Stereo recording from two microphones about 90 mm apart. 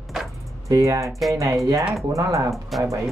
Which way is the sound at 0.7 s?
35° right (ahead or behind).